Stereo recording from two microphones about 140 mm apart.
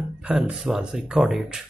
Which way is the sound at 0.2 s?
5° right (ahead or behind).